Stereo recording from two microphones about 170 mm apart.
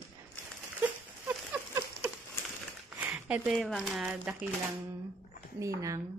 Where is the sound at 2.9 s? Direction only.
5° right (ahead or behind).